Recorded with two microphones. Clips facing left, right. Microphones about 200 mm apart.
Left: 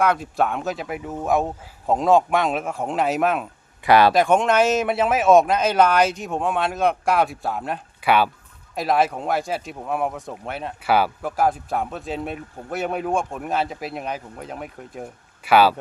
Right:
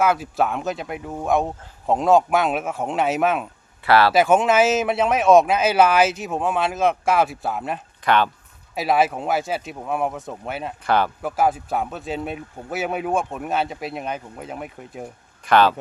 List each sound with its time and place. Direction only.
0.0 s speech: 5° right (ahead or behind)
3.8 s speech: 15° left (ahead or behind)
4.1 s speech: 5° right (ahead or behind)
8.7 s speech: 5° right (ahead or behind)